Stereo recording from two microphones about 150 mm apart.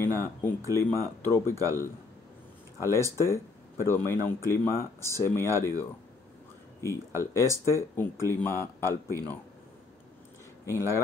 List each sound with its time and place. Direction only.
0.0 s speech: 15° left (ahead or behind)
10.6 s speech: 20° left (ahead or behind)